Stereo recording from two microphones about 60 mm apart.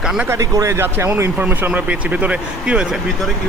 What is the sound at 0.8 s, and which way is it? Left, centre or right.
Speech, right.